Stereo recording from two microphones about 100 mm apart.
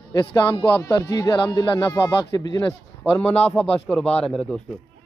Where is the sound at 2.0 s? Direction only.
30° left (ahead or behind).